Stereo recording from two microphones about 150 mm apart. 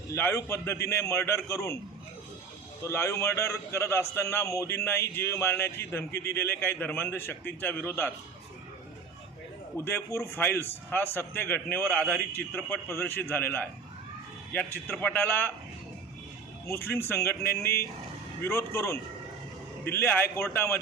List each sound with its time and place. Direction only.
0.1 s a man's voice: 15° left (ahead or behind)
2.8 s a man's voice: 20° left (ahead or behind)
9.7 s a man's voice: 15° left (ahead or behind)
14.8 s a man's voice: 15° left (ahead or behind)
16.9 s a man's voice: 15° left (ahead or behind)